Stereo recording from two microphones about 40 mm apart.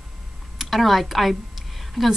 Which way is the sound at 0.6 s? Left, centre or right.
Centre.